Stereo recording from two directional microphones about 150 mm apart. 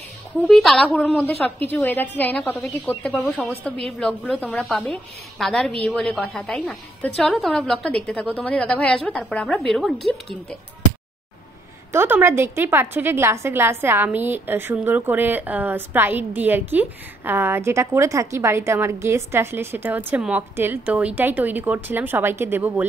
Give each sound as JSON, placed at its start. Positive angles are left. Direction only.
{"t": 0.5, "sound": "a woman's voice", "side_deg": 0}
{"t": 1.7, "sound": "a woman's voice", "side_deg": 15}
{"t": 11.9, "sound": "a woman's voice", "side_deg": -15}